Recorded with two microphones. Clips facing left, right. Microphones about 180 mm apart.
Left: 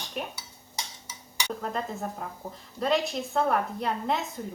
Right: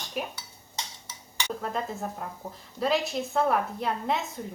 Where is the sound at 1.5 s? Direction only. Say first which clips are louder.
Even; centre (ahead or behind).